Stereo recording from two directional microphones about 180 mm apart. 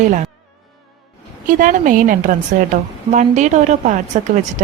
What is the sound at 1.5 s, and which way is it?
A woman's voice, 45° right (ahead or behind).